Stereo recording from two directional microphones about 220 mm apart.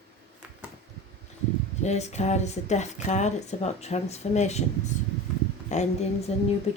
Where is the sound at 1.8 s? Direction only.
30° left (ahead or behind).